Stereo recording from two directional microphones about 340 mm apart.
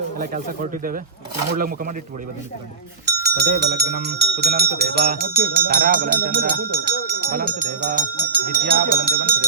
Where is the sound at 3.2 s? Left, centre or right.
Right.